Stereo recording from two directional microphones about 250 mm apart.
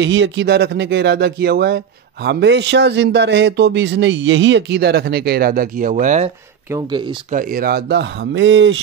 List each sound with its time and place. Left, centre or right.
0.0 s a man's voice: right
6.7 s speech: centre
7.2 s speech: right